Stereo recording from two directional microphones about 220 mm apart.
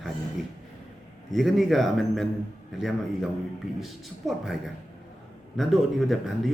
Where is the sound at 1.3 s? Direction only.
Centre (ahead or behind).